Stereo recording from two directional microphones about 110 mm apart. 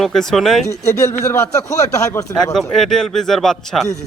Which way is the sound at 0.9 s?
25° left (ahead or behind).